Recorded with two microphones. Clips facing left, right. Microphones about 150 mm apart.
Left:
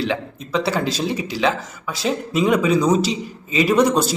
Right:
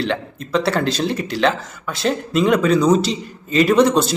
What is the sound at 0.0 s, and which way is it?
A man's voice, 5° left (ahead or behind).